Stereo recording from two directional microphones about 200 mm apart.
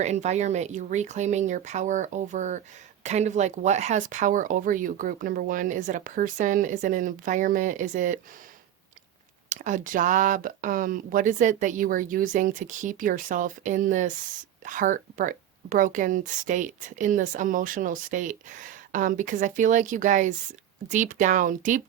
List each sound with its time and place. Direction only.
0.0 s speech: 35° right (ahead or behind)
9.5 s speech: 40° right (ahead or behind)